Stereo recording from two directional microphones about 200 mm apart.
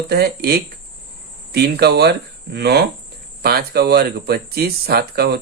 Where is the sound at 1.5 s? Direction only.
50° right (ahead or behind).